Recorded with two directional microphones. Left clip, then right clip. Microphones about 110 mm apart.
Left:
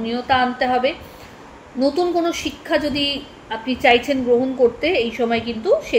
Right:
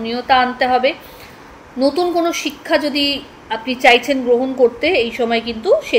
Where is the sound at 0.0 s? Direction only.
35° right (ahead or behind).